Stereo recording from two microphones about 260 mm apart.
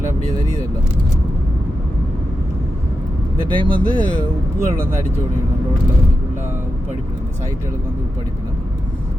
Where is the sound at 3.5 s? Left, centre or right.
Centre.